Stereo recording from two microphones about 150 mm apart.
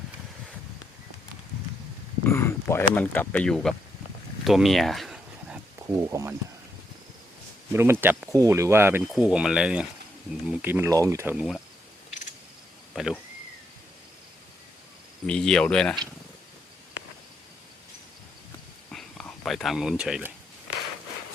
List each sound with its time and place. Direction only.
2.3 s speech: 20° left (ahead or behind)
4.4 s a sound: centre (ahead or behind)
5.8 s speech: 20° right (ahead or behind)
7.7 s speech: 15° right (ahead or behind)
9.1 s speech: 5° right (ahead or behind)
11.3 s speech: centre (ahead or behind)
12.9 s a sound: centre (ahead or behind)
15.3 s speech: 5° left (ahead or behind)
18.9 s a sound: 5° left (ahead or behind)